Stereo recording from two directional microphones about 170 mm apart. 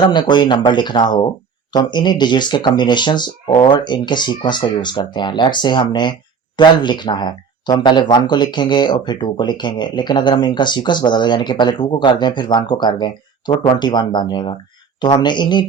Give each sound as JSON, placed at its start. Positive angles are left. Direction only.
{"t": 0.0, "sound": "speech", "side_deg": 25}